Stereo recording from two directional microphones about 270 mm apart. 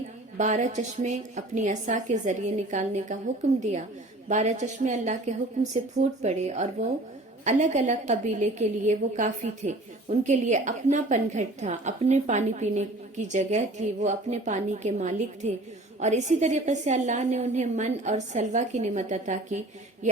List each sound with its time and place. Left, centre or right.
0.3 s a woman's voice: right